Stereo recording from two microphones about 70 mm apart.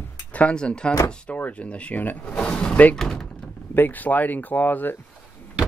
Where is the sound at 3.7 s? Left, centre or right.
Left.